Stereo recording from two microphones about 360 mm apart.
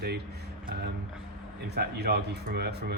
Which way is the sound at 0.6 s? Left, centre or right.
Right.